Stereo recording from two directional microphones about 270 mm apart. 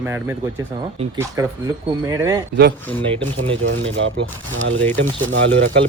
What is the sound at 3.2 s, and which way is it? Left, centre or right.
Speech, right.